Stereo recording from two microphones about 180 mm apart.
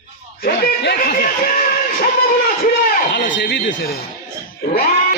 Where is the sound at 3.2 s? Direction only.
90° left.